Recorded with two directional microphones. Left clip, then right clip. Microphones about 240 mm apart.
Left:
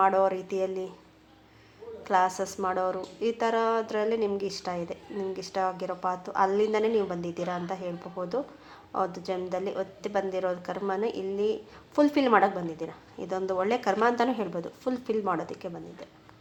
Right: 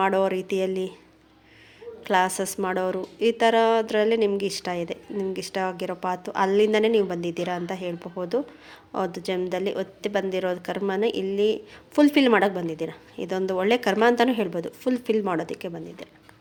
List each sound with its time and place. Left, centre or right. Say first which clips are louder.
0.0 s speech: right 1 dB; right
2.0 s speech: right 3 dB; right